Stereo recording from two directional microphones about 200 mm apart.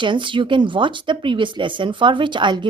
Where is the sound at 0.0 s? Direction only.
25° right (ahead or behind).